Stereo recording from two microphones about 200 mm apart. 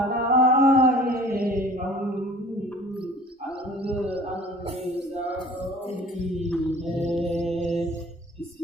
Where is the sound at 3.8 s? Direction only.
30° right (ahead or behind).